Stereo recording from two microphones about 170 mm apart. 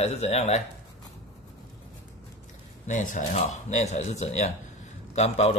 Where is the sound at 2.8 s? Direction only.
45° left (ahead or behind).